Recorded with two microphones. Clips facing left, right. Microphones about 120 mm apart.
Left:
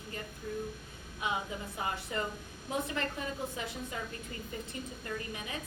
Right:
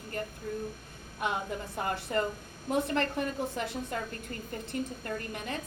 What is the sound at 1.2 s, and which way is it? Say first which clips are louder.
A woman's voice: right 3 dB; 55° right (ahead or behind).